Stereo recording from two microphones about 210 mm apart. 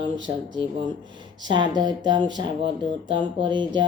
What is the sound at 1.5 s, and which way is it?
Speech, 20° right (ahead or behind).